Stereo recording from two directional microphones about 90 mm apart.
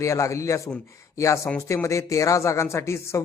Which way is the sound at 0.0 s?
35° left (ahead or behind).